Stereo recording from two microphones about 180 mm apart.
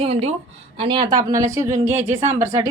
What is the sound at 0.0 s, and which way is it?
A woman's voice, 35° right (ahead or behind).